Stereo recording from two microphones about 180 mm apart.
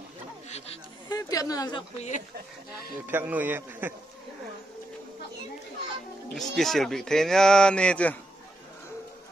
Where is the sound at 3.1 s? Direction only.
10° right (ahead or behind).